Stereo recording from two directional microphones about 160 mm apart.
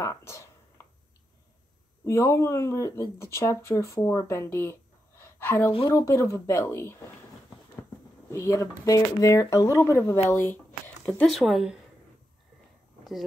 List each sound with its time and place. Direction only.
0.0 s speech: 15° left (ahead or behind)
2.0 s speech: 15° left (ahead or behind)
5.2 s a sound: 15° left (ahead or behind)
5.7 s speech: 35° left (ahead or behind)
5.9 s speech: 20° left (ahead or behind)
8.3 s speech: 15° left (ahead or behind); by 11.8 s 5° right (ahead or behind)